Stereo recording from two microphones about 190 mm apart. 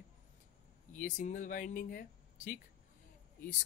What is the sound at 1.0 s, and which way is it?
Speech, 45° left (ahead or behind).